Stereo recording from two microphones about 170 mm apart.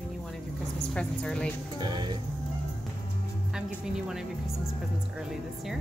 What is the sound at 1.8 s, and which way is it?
Speech, 25° right (ahead or behind).